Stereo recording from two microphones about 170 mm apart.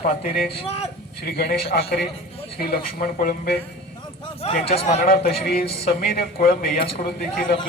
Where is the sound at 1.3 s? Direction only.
65° left (ahead or behind).